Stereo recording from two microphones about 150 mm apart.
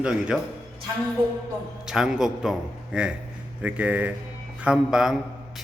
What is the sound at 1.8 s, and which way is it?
A man's voice, 5° right (ahead or behind).